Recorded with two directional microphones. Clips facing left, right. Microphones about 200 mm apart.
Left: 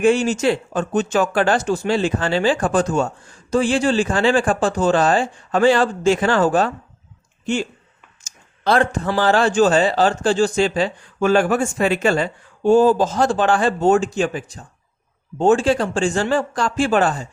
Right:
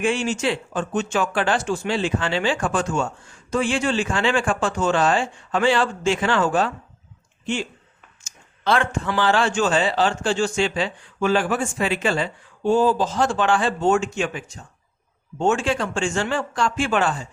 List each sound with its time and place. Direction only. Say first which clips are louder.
0.0 s speech: left 6 dB; 40° left (ahead or behind)